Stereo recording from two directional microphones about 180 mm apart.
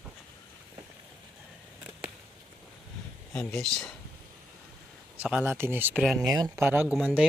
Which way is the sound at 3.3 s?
5° left (ahead or behind).